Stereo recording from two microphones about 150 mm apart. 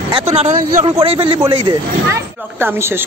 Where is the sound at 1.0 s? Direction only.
35° right (ahead or behind).